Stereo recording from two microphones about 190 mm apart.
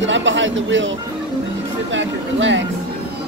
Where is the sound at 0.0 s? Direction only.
80° right.